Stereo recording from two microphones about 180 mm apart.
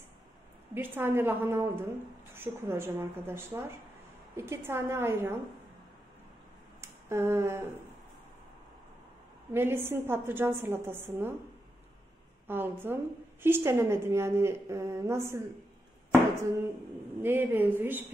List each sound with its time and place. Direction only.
0.7 s a woman's voice: 10° right (ahead or behind)
6.8 s a sound: 15° right (ahead or behind)
9.5 s a woman's voice: 10° right (ahead or behind)
12.4 s a woman's voice: 10° right (ahead or behind)
17.2 s a woman's voice: 10° right (ahead or behind)